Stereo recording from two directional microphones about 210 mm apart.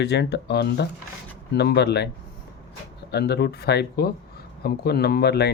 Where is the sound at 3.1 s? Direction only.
50° left (ahead or behind).